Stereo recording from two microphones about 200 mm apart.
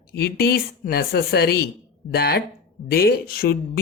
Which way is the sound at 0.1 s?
50° left (ahead or behind).